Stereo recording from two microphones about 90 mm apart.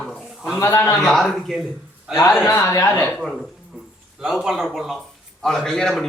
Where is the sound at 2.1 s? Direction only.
35° left (ahead or behind).